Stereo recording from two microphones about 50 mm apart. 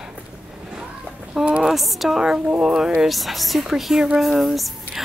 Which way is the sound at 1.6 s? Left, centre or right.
Centre.